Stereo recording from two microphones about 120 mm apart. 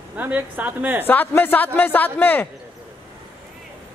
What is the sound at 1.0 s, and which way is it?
A man's voice, 15° left (ahead or behind).